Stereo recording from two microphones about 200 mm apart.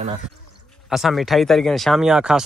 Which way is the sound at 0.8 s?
Centre (ahead or behind).